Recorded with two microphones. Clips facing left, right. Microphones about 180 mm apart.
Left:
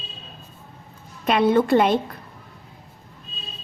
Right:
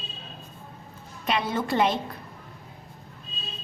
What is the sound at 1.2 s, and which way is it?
Speech, 55° left (ahead or behind).